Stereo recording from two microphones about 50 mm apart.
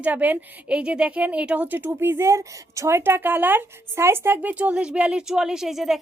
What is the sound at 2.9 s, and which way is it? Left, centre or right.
Speech, right.